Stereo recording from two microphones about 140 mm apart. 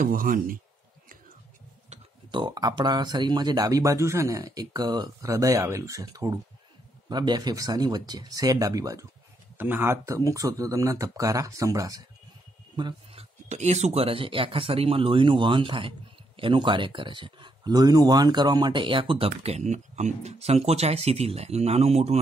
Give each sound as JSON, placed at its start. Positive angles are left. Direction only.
{"t": 0.0, "sound": "speech", "side_deg": -80}
{"t": 2.3, "sound": "speech", "side_deg": -30}
{"t": 9.6, "sound": "speech", "side_deg": -15}
{"t": 12.7, "sound": "a sound", "side_deg": -35}
{"t": 13.5, "sound": "speech", "side_deg": -55}